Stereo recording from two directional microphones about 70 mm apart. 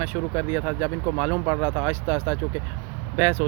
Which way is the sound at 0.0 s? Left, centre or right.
Right.